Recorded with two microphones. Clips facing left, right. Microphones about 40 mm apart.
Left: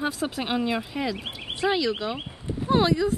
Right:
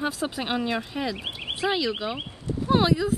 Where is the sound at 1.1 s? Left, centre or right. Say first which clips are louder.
Right 1 dB; right.